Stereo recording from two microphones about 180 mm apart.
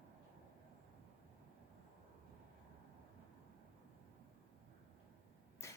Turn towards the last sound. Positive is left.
turn(degrees=15)  # may be behind; listen again after turning